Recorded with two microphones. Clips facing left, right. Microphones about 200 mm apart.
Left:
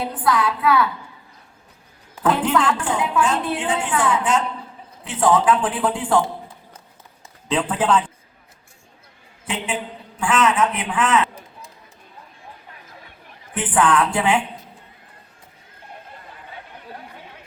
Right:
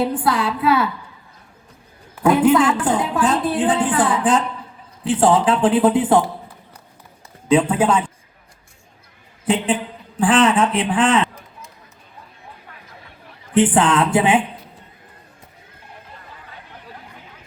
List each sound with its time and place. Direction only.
0.1 s a man's voice: 30° right (ahead or behind)
2.2 s a woman's voice: 10° right (ahead or behind)
2.8 s a woman's voice: 35° right (ahead or behind); by 6.2 s 20° right (ahead or behind)
7.5 s a woman's voice: 10° right (ahead or behind)
10.2 s a woman's voice: 35° right (ahead or behind)
13.5 s a man's voice: 30° right (ahead or behind)